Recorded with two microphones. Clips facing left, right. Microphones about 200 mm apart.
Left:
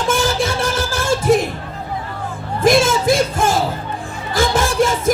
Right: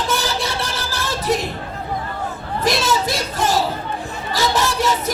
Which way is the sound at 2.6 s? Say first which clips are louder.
Left 7 dB; 50° left (ahead or behind).